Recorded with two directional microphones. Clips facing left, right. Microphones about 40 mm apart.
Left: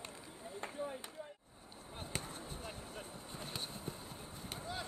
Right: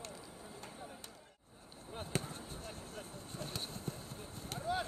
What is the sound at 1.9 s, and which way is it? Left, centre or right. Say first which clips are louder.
Basketball bounce: right 4 dB; centre.